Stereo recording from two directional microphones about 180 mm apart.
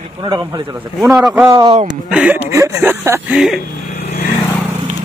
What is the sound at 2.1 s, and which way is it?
Speech, 5° right (ahead or behind).